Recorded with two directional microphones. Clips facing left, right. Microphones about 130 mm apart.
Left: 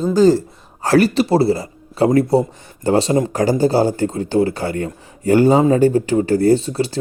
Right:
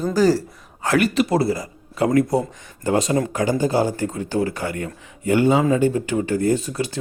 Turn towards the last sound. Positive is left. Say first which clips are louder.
# left 6 dB
turn(degrees=30)  # may be behind; listen again after turning